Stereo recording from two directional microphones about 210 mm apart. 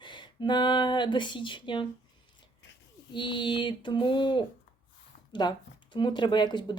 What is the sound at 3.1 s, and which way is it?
Speech, 20° left (ahead or behind).